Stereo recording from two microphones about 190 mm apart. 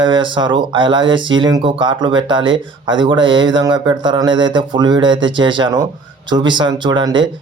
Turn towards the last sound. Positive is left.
turn(degrees=-25)  # may be behind; listen again after turning